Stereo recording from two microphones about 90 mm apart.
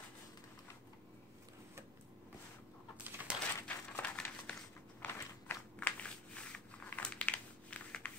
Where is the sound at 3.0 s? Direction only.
20° right (ahead or behind).